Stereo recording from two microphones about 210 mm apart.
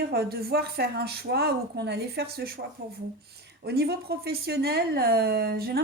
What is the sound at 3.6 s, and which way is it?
Speech, 50° right (ahead or behind).